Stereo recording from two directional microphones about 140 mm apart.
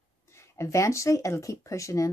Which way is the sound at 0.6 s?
20° left (ahead or behind).